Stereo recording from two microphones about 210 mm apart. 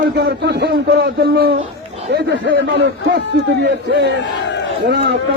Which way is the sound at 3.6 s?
55° right (ahead or behind).